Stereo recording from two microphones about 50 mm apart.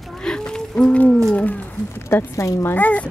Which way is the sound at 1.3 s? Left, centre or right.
Left.